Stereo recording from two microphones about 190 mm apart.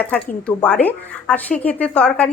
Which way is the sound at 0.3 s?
5° left (ahead or behind).